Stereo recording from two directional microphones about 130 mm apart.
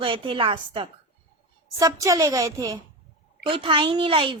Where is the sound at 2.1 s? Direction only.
25° right (ahead or behind).